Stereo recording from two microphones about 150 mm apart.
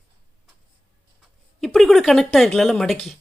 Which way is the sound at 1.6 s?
Centre (ahead or behind).